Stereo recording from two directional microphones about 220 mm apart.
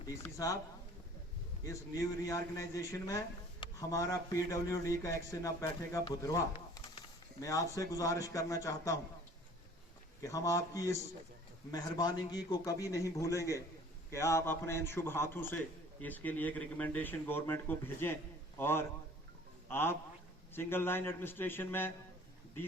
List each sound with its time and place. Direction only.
0.0 s a man's voice: 15° left (ahead or behind)
1.6 s a man's voice: 15° left (ahead or behind)
10.2 s a man's voice: 15° left (ahead or behind)